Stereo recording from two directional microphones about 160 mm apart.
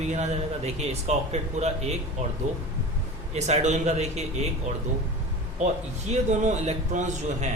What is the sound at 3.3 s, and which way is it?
Speech, 45° right (ahead or behind).